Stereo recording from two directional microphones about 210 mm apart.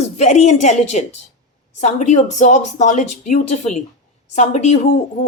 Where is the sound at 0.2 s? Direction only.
35° left (ahead or behind).